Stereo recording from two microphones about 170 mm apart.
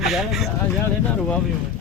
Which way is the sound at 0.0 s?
Centre (ahead or behind).